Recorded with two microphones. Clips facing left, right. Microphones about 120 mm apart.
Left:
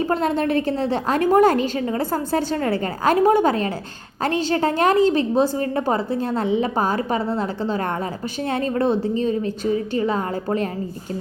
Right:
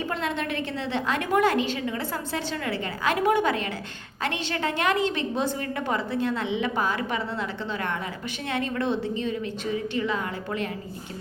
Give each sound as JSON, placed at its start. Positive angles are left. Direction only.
{"t": 0.0, "sound": "a woman's voice", "side_deg": 40}